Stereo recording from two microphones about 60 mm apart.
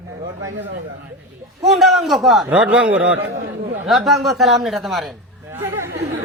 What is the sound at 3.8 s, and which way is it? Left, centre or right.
Speech, centre.